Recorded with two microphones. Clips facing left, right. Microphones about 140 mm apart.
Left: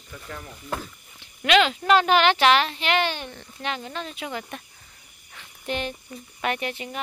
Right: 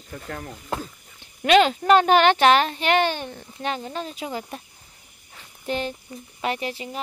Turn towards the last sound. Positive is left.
turn(degrees=-30)  # may be behind; listen again after turning